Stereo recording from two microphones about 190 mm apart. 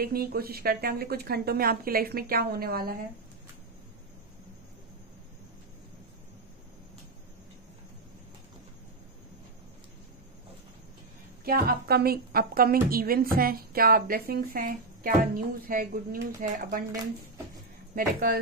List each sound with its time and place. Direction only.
0.0 s a woman's voice: 50° right (ahead or behind)
11.4 s a woman's voice: 50° right (ahead or behind)
17.9 s a woman's voice: 50° right (ahead or behind)